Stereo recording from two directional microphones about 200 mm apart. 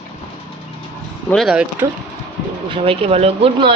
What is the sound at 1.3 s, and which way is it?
Speech, centre (ahead or behind).